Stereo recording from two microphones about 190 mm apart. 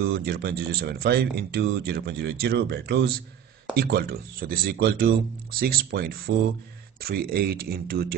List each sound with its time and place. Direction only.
0.1 s speech: 55° right (ahead or behind)